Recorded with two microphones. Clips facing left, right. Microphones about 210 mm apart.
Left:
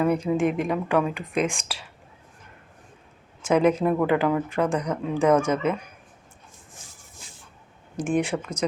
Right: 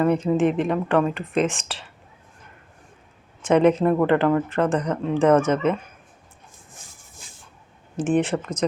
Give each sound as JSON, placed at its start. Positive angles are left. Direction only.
{"t": 0.0, "sound": "speech", "side_deg": 5}
{"t": 3.4, "sound": "speech", "side_deg": 10}
{"t": 7.2, "sound": "spray", "side_deg": -50}
{"t": 7.9, "sound": "speech", "side_deg": 10}